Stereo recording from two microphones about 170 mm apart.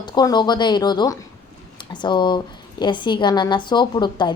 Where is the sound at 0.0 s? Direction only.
25° left (ahead or behind).